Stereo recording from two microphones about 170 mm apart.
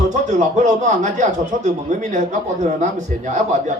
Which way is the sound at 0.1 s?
45° right (ahead or behind).